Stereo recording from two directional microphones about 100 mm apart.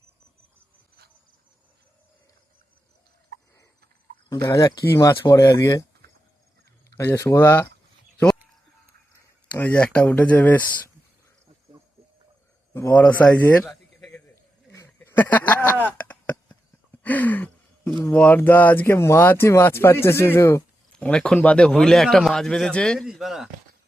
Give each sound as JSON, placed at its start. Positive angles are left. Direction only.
{"t": 4.3, "sound": "speech", "side_deg": 35}
{"t": 6.9, "sound": "speech", "side_deg": 25}
{"t": 9.5, "sound": "speech", "side_deg": 15}
{"t": 12.7, "sound": "speech", "side_deg": 20}
{"t": 14.9, "sound": "a sound", "side_deg": 20}
{"t": 18.1, "sound": "speech", "side_deg": 15}
{"t": 21.0, "sound": "speech", "side_deg": 10}